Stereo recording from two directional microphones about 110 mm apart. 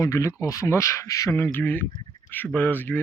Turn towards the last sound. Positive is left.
turn(degrees=15)  # may be behind; listen again after turning